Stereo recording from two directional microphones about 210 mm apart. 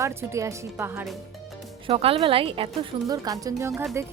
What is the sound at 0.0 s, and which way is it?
Speech, 10° right (ahead or behind).